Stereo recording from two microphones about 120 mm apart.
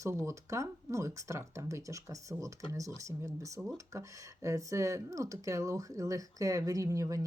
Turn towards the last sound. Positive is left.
turn(degrees=-30)  # may be behind; listen again after turning